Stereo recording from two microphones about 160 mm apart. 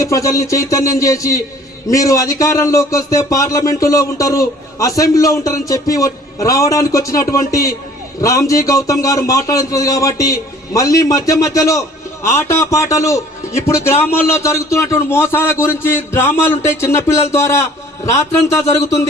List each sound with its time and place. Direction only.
0.0 s a man's voice: 20° left (ahead or behind)